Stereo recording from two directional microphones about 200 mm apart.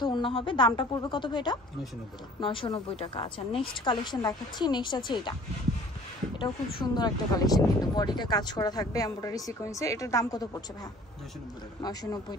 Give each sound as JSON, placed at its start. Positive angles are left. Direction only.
{"t": 0.0, "sound": "speech", "side_deg": 25}
{"t": 6.3, "sound": "speech", "side_deg": 20}
{"t": 11.8, "sound": "speech", "side_deg": 20}